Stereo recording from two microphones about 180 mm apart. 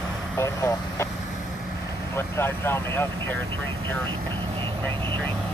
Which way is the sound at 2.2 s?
15° left (ahead or behind).